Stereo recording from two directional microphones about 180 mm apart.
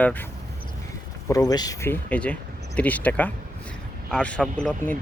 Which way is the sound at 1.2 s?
20° left (ahead or behind).